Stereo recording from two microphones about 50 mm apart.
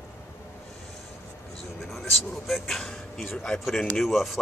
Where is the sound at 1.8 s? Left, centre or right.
Centre.